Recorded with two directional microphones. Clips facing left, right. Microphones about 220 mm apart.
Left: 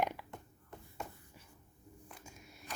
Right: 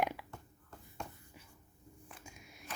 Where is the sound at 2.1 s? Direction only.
10° right (ahead or behind).